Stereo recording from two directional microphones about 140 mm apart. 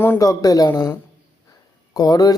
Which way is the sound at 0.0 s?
20° left (ahead or behind).